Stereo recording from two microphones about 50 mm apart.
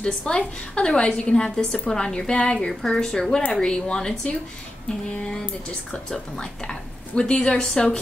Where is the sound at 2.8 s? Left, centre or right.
Centre.